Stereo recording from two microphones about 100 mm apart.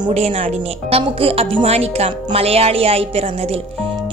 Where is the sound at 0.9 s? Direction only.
75° right (ahead or behind).